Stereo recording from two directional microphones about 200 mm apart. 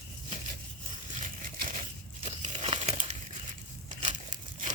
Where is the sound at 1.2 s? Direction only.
40° right (ahead or behind).